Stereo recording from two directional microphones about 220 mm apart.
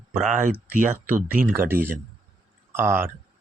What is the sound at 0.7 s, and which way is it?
Speech, 40° right (ahead or behind).